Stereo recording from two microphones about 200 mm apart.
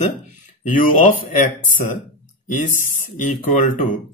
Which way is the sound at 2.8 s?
40° left (ahead or behind).